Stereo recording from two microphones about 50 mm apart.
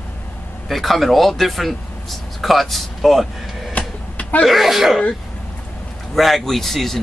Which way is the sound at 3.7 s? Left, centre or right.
Left.